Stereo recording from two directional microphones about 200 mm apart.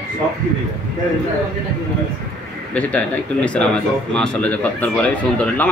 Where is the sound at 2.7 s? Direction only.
5° left (ahead or behind).